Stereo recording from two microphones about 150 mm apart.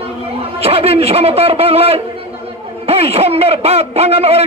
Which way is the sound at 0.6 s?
40° right (ahead or behind).